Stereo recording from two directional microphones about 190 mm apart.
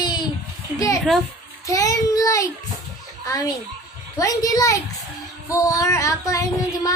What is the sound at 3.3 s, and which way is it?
A woman's voice, 20° left (ahead or behind).